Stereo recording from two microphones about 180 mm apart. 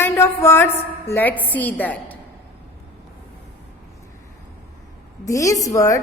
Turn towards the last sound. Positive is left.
turn(degrees=20)  # may be behind; listen again after turning